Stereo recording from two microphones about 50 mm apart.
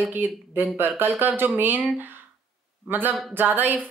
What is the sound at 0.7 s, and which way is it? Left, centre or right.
Speech, right.